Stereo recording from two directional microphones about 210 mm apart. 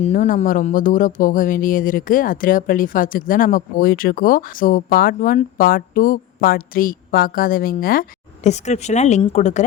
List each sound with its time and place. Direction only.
0.0 s speech: 35° left (ahead or behind)